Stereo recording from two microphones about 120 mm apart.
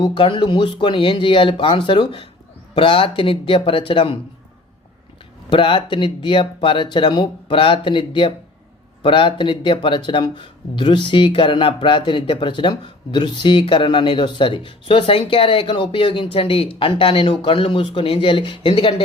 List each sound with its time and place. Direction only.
0.0 s speech: 45° left (ahead or behind)
5.5 s speech: 45° left (ahead or behind)